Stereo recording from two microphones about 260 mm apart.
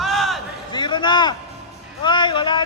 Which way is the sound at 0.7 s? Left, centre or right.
Centre.